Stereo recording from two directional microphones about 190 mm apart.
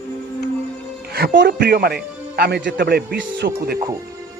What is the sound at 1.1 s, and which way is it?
A man's voice, 55° right (ahead or behind).